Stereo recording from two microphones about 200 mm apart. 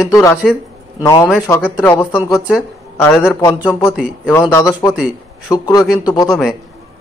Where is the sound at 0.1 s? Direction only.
15° left (ahead or behind).